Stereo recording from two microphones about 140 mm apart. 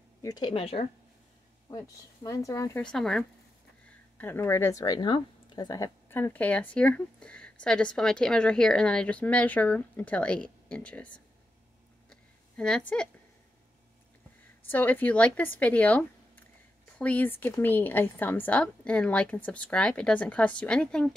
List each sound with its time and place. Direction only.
0.2 s speech: 30° left (ahead or behind)
1.7 s speech: 25° left (ahead or behind)
2.8 s speech: 5° left (ahead or behind)
4.2 s a woman's voice: 15° left (ahead or behind)
12.1 s a sound: 5° left (ahead or behind)
14.7 s a woman's voice: 10° left (ahead or behind)